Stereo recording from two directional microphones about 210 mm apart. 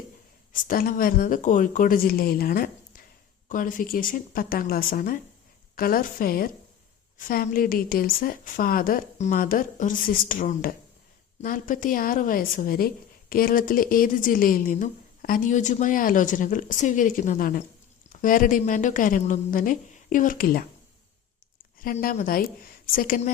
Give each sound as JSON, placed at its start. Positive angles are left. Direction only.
{"t": 0.5, "sound": "a woman's voice", "side_deg": 40}
{"t": 21.8, "sound": "a woman's voice", "side_deg": 45}